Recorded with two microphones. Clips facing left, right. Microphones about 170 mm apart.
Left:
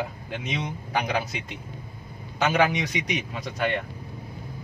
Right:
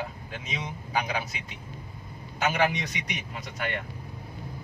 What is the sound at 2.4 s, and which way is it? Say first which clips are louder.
A man's voice: left 4 dB; 90° left.